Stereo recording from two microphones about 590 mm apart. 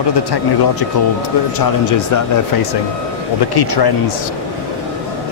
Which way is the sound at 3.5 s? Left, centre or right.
Left.